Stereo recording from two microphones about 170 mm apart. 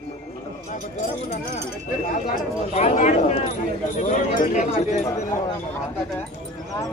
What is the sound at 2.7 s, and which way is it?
Speech, 45° left (ahead or behind).